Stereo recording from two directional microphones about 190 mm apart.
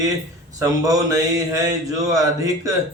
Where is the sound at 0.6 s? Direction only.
20° right (ahead or behind).